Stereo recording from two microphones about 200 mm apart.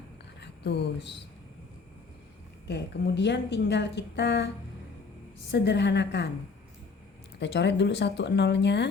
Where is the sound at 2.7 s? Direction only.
60° left (ahead or behind).